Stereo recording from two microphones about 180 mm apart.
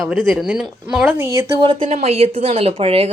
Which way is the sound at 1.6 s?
30° right (ahead or behind).